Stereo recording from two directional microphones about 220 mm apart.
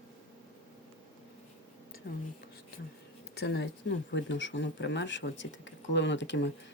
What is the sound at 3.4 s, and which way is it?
Speech, 50° left (ahead or behind).